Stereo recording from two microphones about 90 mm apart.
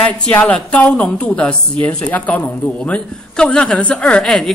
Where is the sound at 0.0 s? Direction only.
15° left (ahead or behind).